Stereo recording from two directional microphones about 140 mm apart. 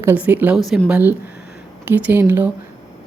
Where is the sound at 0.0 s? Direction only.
15° right (ahead or behind).